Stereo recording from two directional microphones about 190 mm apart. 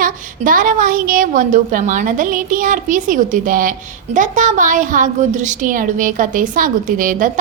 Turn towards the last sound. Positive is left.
turn(degrees=-45)  # may be behind; listen again after turning